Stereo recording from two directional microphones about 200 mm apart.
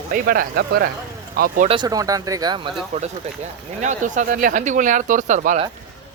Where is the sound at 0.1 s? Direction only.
45° right (ahead or behind).